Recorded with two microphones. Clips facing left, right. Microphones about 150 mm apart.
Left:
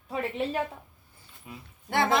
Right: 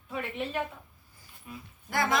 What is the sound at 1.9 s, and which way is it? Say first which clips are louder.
Speech: left 4 dB; 25° left (ahead or behind).